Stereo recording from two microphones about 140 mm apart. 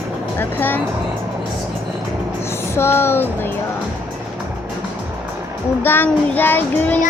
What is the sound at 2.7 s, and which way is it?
Speech, 15° left (ahead or behind).